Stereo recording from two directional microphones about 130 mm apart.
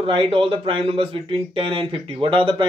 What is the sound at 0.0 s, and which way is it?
Speech, 40° right (ahead or behind).